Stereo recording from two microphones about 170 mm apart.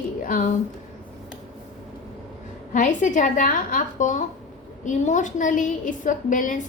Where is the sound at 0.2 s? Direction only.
50° left (ahead or behind).